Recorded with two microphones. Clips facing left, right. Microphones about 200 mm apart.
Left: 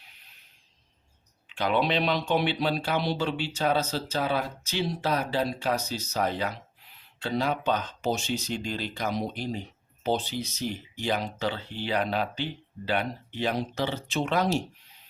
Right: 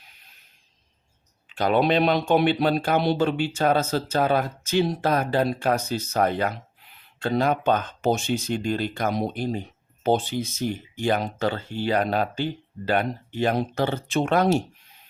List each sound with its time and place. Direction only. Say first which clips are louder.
1.5 s speech: right 5 dB; 40° right (ahead or behind)